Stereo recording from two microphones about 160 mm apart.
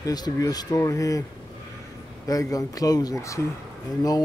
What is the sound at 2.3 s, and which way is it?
A man's voice, 20° left (ahead or behind).